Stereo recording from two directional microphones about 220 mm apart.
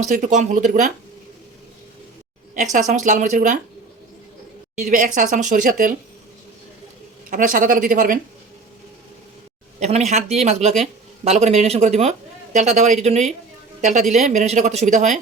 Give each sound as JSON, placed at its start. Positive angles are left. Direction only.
{"t": 0.0, "sound": "speech", "side_deg": -35}
{"t": 2.7, "sound": "speech", "side_deg": -35}
{"t": 4.7, "sound": "speech", "side_deg": -35}
{"t": 7.3, "sound": "speech", "side_deg": -40}
{"t": 9.8, "sound": "speech", "side_deg": -30}